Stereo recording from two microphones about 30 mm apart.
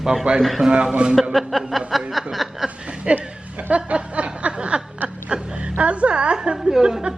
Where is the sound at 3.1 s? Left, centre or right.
Right.